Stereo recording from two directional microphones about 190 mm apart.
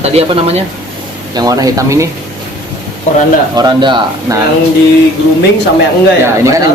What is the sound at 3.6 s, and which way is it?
Speech, 25° right (ahead or behind).